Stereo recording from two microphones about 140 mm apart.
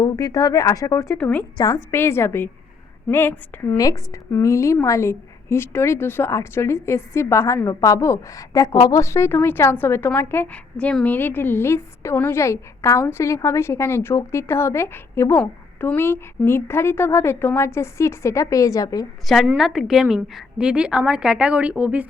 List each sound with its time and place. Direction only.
0.0 s a woman's voice: 25° left (ahead or behind)
1.5 s a woman's voice: 25° left (ahead or behind)
19.5 s a woman's voice: centre (ahead or behind)